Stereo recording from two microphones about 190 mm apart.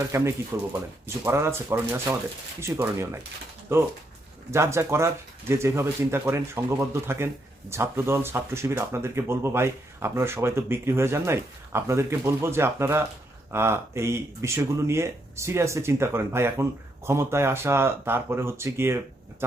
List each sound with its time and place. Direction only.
0.1 s speech: 15° right (ahead or behind)